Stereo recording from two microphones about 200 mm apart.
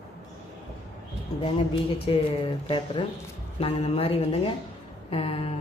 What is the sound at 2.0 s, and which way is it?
Speech, 25° left (ahead or behind).